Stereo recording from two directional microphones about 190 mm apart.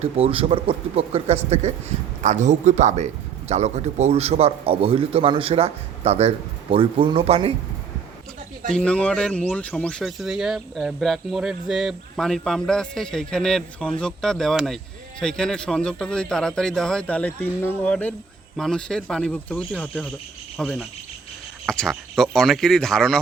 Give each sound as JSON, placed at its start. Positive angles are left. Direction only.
{"t": 0.0, "sound": "a man's voice", "side_deg": -30}
{"t": 8.7, "sound": "speech", "side_deg": 5}